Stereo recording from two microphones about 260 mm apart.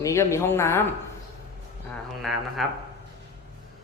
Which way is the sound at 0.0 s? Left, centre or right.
Centre.